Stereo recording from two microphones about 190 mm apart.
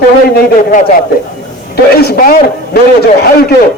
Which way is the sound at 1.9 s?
55° left (ahead or behind).